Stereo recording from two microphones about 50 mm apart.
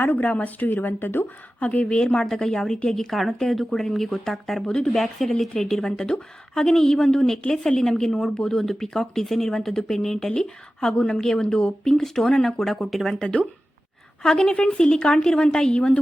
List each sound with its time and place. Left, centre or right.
0.0 s speech: left
1.5 s speech: left; by 4.7 s centre
4.7 s speech: centre
4.9 s speech: centre
13.1 s speech: centre